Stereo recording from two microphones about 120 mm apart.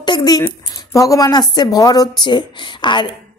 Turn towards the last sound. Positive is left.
turn(degrees=40)  # may be behind; listen again after turning